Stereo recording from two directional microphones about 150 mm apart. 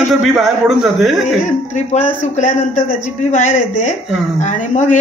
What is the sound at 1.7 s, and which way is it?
A man's voice, 55° left (ahead or behind).